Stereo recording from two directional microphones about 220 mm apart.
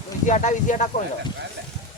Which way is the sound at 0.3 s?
35° left (ahead or behind).